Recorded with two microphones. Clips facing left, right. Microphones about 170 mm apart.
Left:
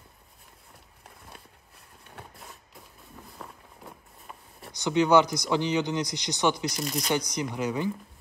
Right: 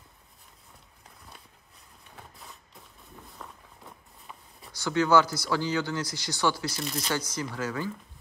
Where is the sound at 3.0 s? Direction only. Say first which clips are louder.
Left 1 dB; centre (ahead or behind).